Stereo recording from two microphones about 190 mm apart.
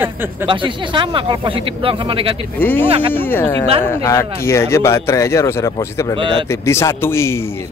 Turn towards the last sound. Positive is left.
turn(degrees=15)  # may be behind; listen again after turning